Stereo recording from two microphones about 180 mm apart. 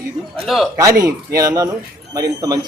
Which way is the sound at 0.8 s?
20° right (ahead or behind).